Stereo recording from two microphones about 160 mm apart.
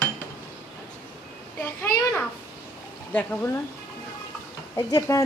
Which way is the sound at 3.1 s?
10° left (ahead or behind).